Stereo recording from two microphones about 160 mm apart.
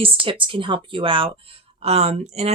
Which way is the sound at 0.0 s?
35° right (ahead or behind).